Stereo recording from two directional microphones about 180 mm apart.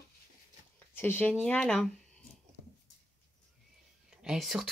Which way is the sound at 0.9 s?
10° left (ahead or behind).